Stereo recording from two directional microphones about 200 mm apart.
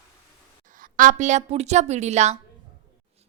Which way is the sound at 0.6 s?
45° right (ahead or behind).